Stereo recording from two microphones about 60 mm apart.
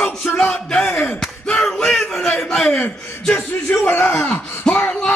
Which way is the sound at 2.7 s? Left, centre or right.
Left.